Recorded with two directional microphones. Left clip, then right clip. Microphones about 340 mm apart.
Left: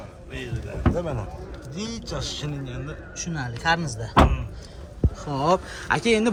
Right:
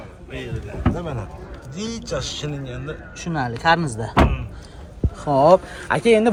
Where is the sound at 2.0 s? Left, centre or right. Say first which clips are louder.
Right 7 dB; right.